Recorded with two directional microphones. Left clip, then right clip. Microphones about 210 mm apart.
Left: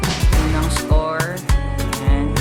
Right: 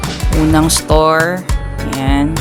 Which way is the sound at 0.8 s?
50° right (ahead or behind).